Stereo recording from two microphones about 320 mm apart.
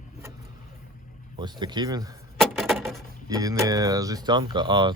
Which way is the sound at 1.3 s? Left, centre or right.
Centre.